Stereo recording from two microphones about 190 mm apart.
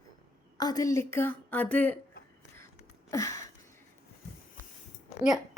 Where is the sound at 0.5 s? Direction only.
20° left (ahead or behind).